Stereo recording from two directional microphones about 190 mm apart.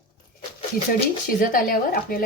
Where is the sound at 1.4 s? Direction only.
50° left (ahead or behind).